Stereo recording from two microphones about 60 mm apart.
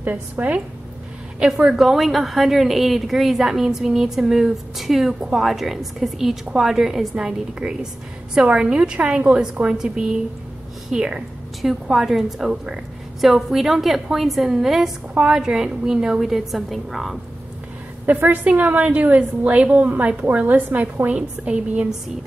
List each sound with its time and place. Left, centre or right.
0.0 s a woman's voice: right
1.4 s a woman's voice: centre
11.6 s a woman's voice: centre
18.0 s a woman's voice: right